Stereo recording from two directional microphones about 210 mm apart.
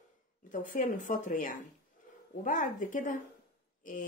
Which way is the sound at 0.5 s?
40° left (ahead or behind).